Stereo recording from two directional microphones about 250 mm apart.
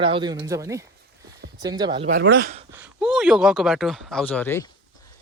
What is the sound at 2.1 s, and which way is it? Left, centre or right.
Speech, right.